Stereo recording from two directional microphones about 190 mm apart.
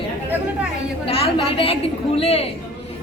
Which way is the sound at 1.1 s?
30° left (ahead or behind).